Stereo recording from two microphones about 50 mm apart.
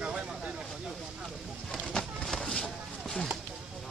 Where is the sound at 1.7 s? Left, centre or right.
Centre.